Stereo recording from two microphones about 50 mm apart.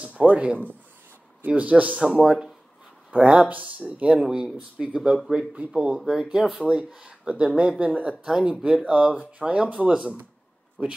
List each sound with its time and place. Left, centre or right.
0.0 s a man's voice: right
2.0 s speech: centre
4.2 s speech: centre